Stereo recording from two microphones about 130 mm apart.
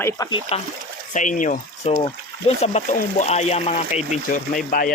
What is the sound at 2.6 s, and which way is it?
Speech, 60° left (ahead or behind).